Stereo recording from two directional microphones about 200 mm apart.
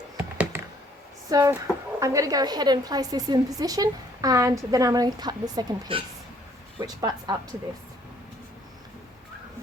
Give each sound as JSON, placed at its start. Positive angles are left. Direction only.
{"t": 0.2, "sound": "computer keyboard", "side_deg": -5}
{"t": 1.3, "sound": "a woman's voice", "side_deg": -15}